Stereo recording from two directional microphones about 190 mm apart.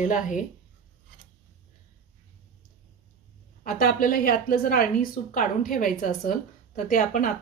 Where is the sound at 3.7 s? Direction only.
50° left (ahead or behind).